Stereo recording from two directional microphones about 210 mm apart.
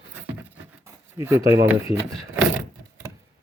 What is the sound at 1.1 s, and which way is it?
Speech, 10° right (ahead or behind).